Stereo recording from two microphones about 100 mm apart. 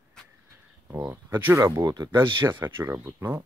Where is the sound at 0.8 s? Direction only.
25° right (ahead or behind); by 2.0 s 40° right (ahead or behind).